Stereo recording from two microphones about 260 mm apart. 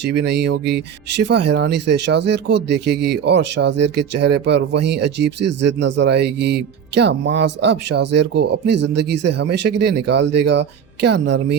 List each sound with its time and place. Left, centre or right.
0.0 s speech: right